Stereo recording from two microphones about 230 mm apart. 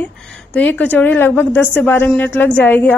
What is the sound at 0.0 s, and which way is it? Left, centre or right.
A woman's voice, centre.